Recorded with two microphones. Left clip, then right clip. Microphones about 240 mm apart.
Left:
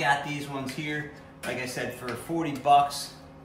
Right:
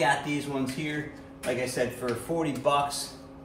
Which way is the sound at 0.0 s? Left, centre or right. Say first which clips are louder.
Even; centre.